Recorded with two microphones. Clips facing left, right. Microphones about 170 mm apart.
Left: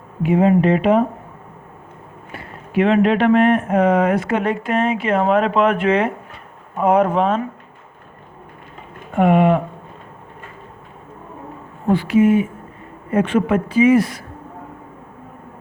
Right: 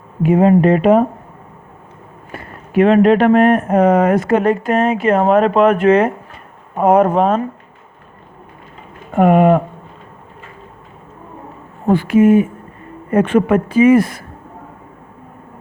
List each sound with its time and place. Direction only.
0.2 s speech: 45° right (ahead or behind)
2.3 s speech: 45° right (ahead or behind)
9.1 s speech: 45° right (ahead or behind)
11.9 s speech: 50° right (ahead or behind)